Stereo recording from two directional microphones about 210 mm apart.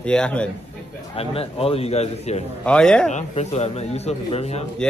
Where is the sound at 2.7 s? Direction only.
5° left (ahead or behind).